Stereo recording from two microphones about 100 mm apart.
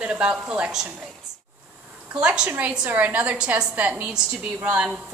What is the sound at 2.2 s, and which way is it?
A woman's voice, 10° right (ahead or behind).